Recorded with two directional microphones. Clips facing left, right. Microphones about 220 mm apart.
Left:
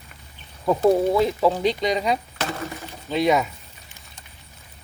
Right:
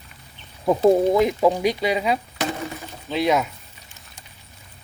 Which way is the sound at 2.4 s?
15° right (ahead or behind).